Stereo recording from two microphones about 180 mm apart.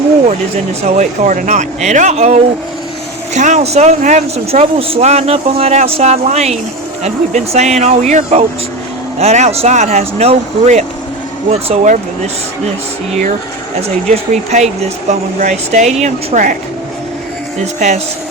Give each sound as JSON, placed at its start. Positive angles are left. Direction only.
{"t": 0.8, "sound": "speech", "side_deg": -40}
{"t": 14.1, "sound": "speech", "side_deg": -40}
{"t": 17.7, "sound": "speech", "side_deg": -40}